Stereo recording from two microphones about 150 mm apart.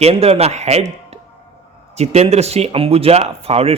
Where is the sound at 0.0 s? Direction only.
45° right (ahead or behind).